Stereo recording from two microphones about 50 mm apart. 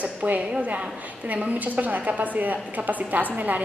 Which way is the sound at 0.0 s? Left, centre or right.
Right.